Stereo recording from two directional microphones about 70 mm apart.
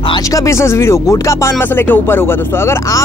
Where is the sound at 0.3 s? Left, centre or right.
Left.